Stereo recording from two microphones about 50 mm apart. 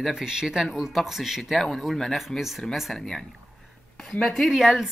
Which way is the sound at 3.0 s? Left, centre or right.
Centre.